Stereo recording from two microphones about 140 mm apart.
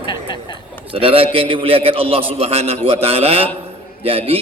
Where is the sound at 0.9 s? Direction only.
40° right (ahead or behind).